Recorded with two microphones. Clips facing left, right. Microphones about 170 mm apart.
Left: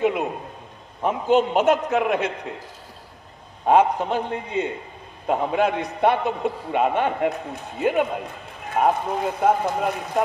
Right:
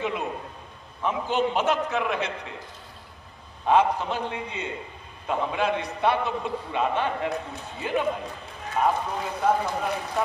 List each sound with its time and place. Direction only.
0.0 s a man's voice: 55° left (ahead or behind)
3.6 s a man's voice: 50° left (ahead or behind)